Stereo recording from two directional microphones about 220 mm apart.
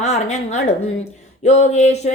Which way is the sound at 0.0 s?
30° left (ahead or behind).